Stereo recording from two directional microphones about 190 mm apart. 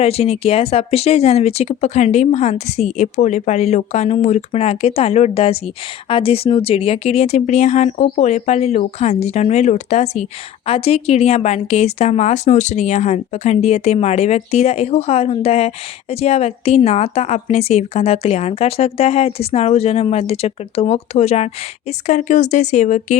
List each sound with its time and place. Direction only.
0.0 s speech: 35° left (ahead or behind)